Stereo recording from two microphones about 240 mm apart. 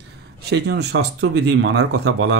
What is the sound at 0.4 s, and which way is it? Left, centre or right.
Speech, right.